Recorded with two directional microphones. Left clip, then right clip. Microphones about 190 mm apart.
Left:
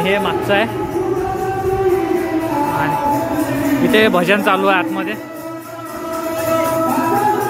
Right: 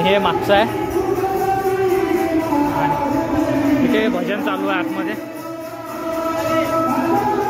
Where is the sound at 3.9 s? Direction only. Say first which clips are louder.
Left 6 dB; 30° left (ahead or behind).